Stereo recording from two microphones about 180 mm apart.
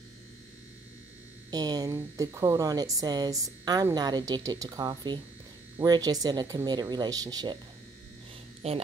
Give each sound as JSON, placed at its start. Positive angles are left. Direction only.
{"t": 1.5, "sound": "speech", "side_deg": -20}
{"t": 8.6, "sound": "speech", "side_deg": -35}